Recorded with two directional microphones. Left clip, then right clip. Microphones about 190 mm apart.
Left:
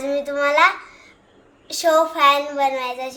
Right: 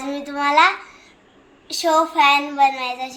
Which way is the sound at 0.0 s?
20° left (ahead or behind).